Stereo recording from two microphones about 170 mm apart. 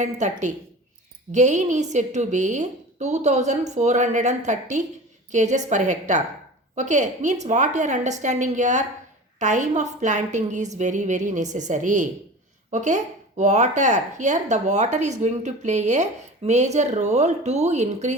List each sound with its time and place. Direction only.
0.0 s speech: 45° right (ahead or behind)